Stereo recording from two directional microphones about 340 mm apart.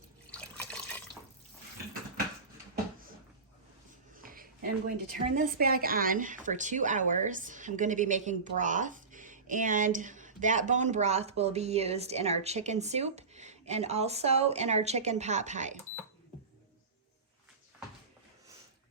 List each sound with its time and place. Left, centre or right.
0.3 s water: centre
4.2 s a sound: right
5.1 s a woman's voice: right